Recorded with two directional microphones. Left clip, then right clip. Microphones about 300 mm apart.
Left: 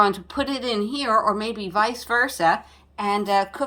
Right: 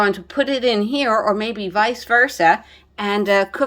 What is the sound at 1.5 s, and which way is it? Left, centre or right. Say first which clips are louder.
Speech: right 4 dB; centre.